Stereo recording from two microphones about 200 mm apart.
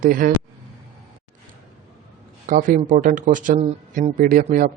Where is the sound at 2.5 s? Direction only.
40° right (ahead or behind).